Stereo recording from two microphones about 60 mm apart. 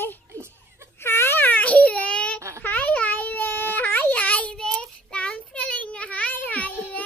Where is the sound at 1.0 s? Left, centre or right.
Left; by 2.4 s centre.